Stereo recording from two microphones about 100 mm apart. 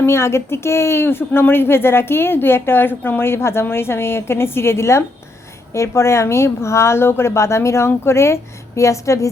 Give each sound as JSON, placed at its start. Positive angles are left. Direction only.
{"t": 0.0, "sound": "speech", "side_deg": 25}